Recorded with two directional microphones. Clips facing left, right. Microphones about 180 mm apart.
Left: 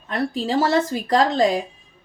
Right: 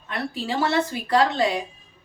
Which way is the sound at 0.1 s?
40° left (ahead or behind).